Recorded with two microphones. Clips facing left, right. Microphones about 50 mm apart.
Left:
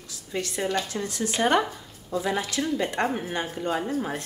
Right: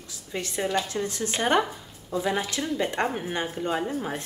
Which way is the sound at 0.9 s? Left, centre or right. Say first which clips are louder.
Even; right.